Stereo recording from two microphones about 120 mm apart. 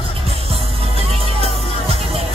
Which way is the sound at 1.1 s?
55° right (ahead or behind).